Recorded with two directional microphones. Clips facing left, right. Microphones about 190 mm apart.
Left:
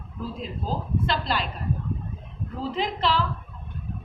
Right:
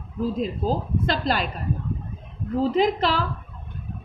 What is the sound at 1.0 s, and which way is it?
Speech, 45° right (ahead or behind).